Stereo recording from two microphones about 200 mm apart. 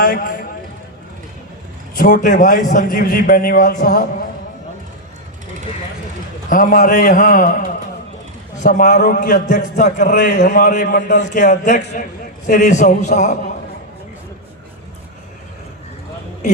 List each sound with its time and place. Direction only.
0.0 s a man's voice: 40° left (ahead or behind)
2.0 s a man's voice: 40° left (ahead or behind)
6.5 s a man's voice: 45° left (ahead or behind)